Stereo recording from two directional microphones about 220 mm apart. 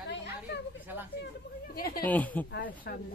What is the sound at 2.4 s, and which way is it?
Speech, 50° left (ahead or behind).